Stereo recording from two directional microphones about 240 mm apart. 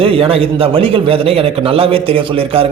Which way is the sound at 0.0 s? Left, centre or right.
Right.